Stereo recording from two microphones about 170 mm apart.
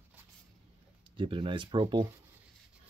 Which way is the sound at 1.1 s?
30° right (ahead or behind).